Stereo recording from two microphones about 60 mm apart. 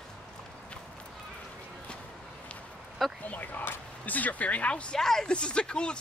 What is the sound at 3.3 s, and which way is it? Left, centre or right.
Speech, left.